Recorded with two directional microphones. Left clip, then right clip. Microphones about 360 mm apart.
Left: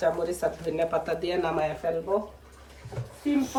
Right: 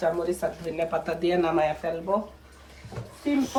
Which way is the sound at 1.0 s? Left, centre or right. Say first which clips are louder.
Right 3 dB; centre.